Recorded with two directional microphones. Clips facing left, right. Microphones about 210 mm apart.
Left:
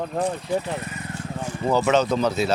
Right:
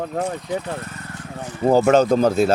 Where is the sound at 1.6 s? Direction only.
50° right (ahead or behind).